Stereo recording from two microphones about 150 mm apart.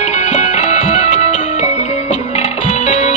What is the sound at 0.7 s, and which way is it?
Music, 50° left (ahead or behind).